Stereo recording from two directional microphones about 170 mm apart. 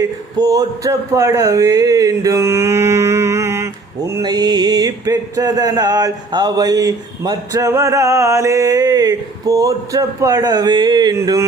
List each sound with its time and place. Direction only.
0.0 s a man's voice: 20° right (ahead or behind)
4.1 s music: 25° right (ahead or behind)
11.2 s a man's voice: 15° right (ahead or behind)